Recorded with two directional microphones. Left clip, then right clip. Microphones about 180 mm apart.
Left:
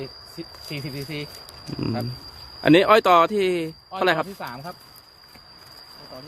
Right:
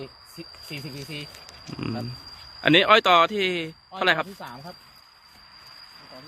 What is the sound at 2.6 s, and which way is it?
A man's voice, 10° left (ahead or behind).